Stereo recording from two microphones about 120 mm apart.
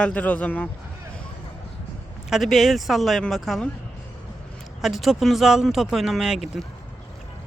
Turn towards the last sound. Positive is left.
turn(degrees=-5)  # may be behind; listen again after turning